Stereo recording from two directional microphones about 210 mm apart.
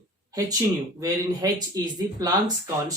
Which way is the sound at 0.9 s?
15° right (ahead or behind).